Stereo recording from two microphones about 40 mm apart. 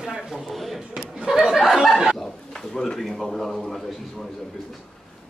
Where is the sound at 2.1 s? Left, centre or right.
Centre.